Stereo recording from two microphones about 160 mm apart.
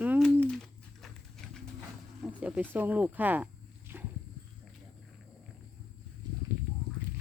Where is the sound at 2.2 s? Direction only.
10° right (ahead or behind).